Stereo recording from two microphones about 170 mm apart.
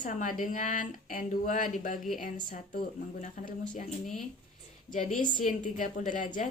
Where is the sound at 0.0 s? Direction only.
50° left (ahead or behind).